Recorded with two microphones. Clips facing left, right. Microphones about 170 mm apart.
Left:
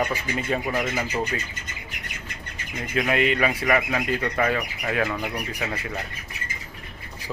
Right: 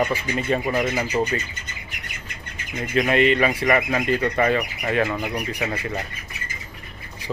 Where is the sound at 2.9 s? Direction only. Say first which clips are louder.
Right 4 dB; 5° left (ahead or behind).